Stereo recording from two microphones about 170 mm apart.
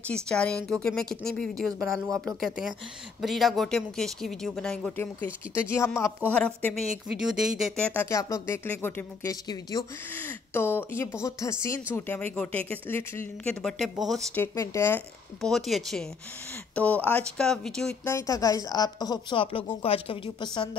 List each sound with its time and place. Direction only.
0.1 s a woman's voice: 5° left (ahead or behind)
14.3 s speech: 15° left (ahead or behind)
15.4 s speech: centre (ahead or behind)
18.0 s a woman's voice: 20° left (ahead or behind); by 20.4 s 35° left (ahead or behind)